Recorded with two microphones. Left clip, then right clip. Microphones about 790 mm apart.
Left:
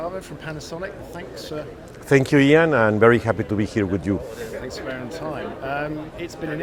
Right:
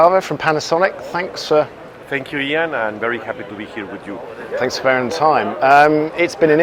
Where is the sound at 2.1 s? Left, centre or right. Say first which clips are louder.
Left 4 dB; left.